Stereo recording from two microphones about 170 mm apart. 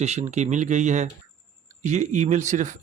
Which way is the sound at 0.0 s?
40° right (ahead or behind).